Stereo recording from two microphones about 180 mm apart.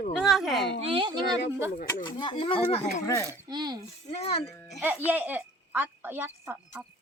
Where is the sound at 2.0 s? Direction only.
25° left (ahead or behind).